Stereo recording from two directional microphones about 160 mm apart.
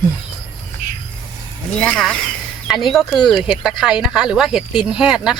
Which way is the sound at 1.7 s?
5° left (ahead or behind).